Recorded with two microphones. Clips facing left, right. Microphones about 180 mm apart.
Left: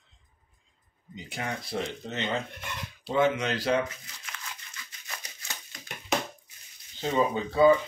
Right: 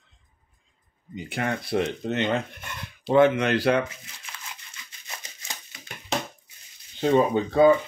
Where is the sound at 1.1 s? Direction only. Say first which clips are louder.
Right 6 dB; 60° right (ahead or behind).